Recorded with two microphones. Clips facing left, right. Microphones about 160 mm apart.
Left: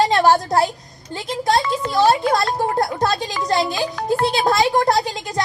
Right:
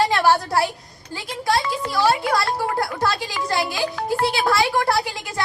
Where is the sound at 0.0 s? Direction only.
20° left (ahead or behind).